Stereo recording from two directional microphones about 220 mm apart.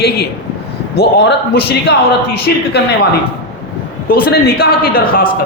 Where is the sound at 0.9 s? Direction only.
45° left (ahead or behind).